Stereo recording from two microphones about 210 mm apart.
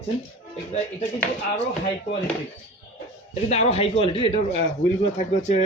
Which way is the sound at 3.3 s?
30° left (ahead or behind).